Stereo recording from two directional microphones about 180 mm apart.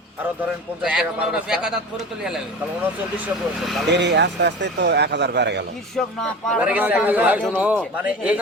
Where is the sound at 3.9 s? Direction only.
70° right (ahead or behind).